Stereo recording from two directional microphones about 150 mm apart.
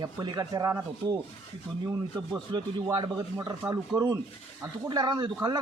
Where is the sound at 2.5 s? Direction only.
30° right (ahead or behind).